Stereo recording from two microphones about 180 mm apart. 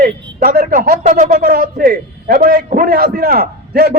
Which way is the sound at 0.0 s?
55° right (ahead or behind).